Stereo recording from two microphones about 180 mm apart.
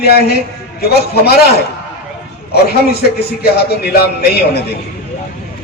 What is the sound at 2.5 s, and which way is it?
A man's voice, 60° left (ahead or behind).